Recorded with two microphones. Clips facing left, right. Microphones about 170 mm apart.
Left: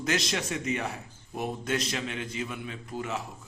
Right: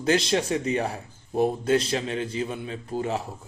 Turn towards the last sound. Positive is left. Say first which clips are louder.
# right 6 dB
turn(degrees=-30)  # may be behind; listen again after turning